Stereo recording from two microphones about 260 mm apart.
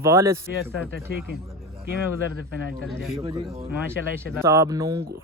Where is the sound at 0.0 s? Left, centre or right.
Centre.